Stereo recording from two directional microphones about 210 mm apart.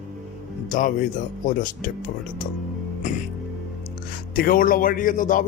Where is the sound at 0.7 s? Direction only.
40° left (ahead or behind).